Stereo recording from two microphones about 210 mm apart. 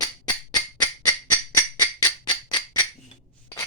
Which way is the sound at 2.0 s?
20° left (ahead or behind).